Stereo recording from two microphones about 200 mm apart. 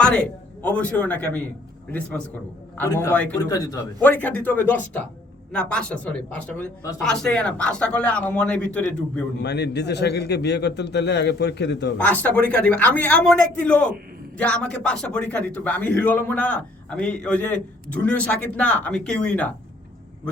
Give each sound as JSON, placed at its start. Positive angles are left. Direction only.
{"t": 0.6, "sound": "a man's voice", "side_deg": 5}
{"t": 9.4, "sound": "a man's voice", "side_deg": 55}
{"t": 11.9, "sound": "a man's voice", "side_deg": 10}